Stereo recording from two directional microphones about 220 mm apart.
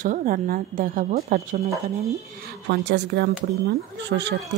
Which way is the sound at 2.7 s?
45° right (ahead or behind).